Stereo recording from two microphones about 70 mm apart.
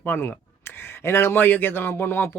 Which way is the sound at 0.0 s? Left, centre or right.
Left.